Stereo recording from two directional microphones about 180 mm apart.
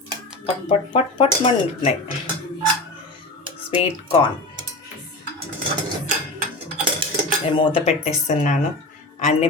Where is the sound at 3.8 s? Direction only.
30° left (ahead or behind).